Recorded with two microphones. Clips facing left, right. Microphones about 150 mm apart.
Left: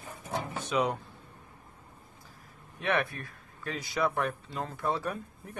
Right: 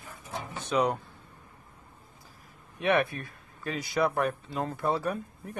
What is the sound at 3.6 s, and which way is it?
Speech, 5° right (ahead or behind).